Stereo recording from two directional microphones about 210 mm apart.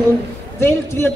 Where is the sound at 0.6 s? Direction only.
10° left (ahead or behind).